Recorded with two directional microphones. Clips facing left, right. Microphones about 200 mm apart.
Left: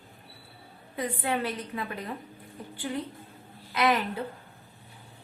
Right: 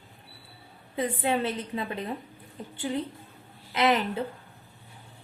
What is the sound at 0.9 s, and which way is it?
A woman's voice, 25° right (ahead or behind).